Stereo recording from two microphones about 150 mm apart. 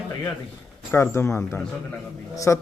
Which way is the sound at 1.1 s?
20° left (ahead or behind).